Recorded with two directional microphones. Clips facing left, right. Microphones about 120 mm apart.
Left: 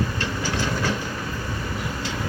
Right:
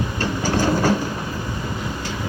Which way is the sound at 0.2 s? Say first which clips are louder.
Right 5 dB; 45° right (ahead or behind).